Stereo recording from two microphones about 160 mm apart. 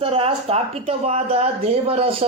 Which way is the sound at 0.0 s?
35° right (ahead or behind).